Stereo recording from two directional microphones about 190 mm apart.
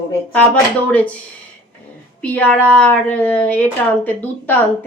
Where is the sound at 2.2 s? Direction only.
10° left (ahead or behind).